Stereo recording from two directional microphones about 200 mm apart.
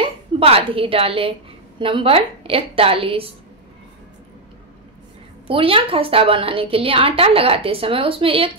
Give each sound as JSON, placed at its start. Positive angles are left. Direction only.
{"t": 0.0, "sound": "a woman's voice", "side_deg": -30}
{"t": 5.5, "sound": "a woman's voice", "side_deg": -25}